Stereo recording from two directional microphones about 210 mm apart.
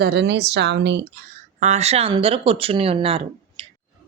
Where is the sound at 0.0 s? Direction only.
55° right (ahead or behind).